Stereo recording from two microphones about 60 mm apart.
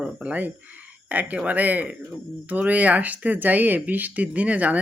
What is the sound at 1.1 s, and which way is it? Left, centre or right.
Speech, right.